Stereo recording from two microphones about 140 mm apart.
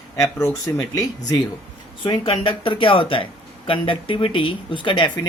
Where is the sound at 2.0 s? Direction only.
35° left (ahead or behind).